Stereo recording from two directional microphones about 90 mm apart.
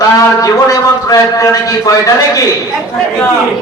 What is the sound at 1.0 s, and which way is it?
A man's voice, 40° left (ahead or behind).